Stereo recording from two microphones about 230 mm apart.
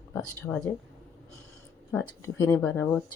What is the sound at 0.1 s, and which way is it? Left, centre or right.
Speech, centre.